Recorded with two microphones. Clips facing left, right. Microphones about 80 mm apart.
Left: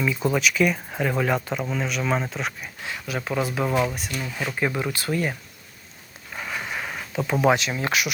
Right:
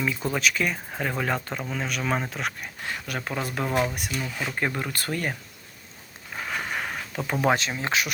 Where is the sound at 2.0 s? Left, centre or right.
Centre.